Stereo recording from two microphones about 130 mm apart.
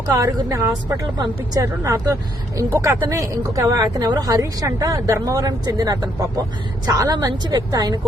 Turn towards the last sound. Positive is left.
turn(degrees=-30)  # may be behind; listen again after turning